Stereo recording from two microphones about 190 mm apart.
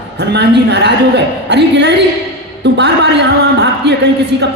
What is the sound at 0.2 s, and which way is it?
A man's voice, 60° right (ahead or behind).